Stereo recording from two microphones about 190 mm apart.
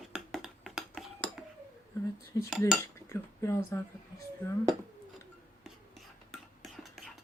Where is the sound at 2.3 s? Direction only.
15° left (ahead or behind).